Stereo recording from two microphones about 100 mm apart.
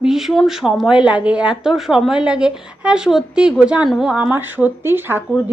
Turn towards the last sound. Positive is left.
turn(degrees=-20)  # may be behind; listen again after turning